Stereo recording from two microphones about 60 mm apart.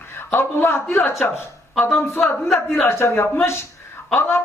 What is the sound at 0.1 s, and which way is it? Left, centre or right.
A man's voice, left.